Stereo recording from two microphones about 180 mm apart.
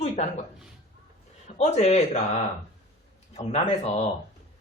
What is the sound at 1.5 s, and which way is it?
Speech, 35° left (ahead or behind).